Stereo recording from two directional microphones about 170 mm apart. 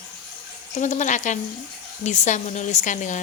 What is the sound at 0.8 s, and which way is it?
A woman's voice, 45° left (ahead or behind).